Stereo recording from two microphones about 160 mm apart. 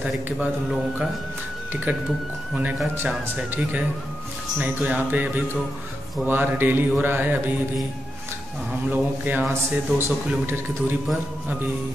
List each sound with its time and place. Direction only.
1.9 s a man's voice: 10° right (ahead or behind)
8.9 s a man's voice: 10° right (ahead or behind)